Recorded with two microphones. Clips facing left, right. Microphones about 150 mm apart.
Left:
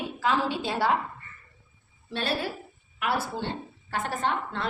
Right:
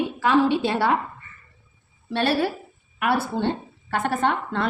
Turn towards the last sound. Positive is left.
turn(degrees=-60)  # may be behind; listen again after turning